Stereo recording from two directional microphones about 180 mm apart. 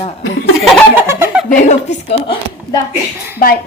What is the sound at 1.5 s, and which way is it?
Speech, 40° left (ahead or behind).